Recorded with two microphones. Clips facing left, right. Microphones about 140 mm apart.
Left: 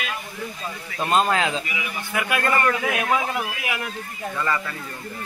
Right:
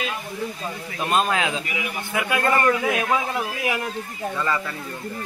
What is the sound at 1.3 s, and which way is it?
Speech, 5° right (ahead or behind).